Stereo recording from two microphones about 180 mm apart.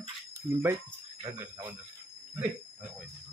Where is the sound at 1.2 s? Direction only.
25° right (ahead or behind).